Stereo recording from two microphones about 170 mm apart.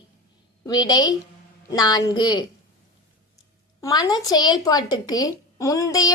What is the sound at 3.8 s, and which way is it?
Speech, 20° left (ahead or behind).